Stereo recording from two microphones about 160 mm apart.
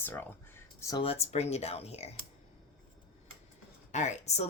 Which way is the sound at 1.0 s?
40° left (ahead or behind).